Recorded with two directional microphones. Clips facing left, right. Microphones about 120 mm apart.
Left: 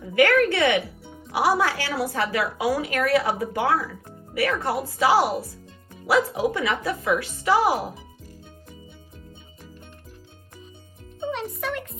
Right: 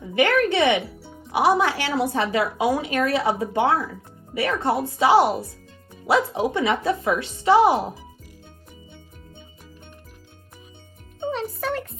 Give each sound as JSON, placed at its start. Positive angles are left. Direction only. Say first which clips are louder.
{"t": 0.1, "sound": "a woman's voice", "louder": "left 1 dB", "side_deg": -20}
{"t": 11.3, "sound": "music", "louder": "right 3 dB", "side_deg": -35}